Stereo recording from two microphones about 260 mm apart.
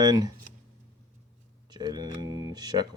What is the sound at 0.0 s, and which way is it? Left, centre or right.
Speech, centre.